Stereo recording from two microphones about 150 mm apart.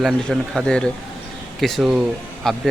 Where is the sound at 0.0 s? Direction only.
5° left (ahead or behind).